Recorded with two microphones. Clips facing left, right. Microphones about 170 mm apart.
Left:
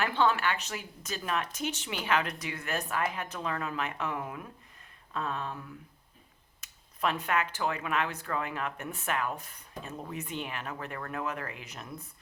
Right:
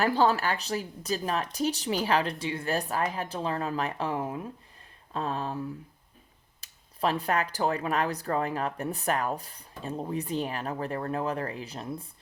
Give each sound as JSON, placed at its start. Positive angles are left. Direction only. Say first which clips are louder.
{"t": 0.0, "sound": "speech", "louder": "right 3 dB", "side_deg": -35}